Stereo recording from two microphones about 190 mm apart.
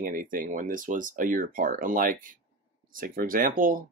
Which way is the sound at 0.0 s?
45° right (ahead or behind).